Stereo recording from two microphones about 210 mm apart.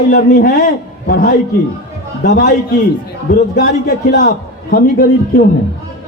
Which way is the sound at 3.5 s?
45° left (ahead or behind).